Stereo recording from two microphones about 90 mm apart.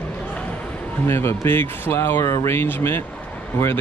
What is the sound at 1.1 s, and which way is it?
Speech, 25° left (ahead or behind).